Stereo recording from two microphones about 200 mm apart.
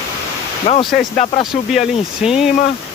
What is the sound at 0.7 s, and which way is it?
Speech, 35° left (ahead or behind).